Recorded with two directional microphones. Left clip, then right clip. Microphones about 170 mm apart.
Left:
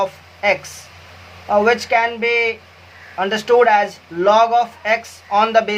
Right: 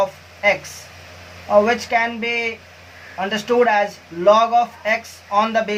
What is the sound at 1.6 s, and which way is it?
Speech, 55° left (ahead or behind).